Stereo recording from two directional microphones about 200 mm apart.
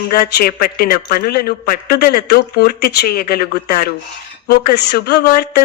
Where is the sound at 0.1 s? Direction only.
50° left (ahead or behind).